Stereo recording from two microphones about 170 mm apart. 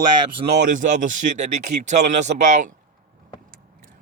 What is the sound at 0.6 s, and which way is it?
Speech, 50° right (ahead or behind).